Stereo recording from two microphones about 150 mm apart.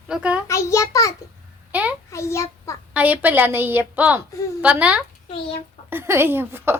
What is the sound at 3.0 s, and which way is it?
A woman's voice, 10° right (ahead or behind).